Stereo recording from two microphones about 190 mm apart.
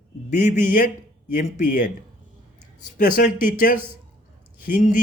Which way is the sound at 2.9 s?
45° left (ahead or behind).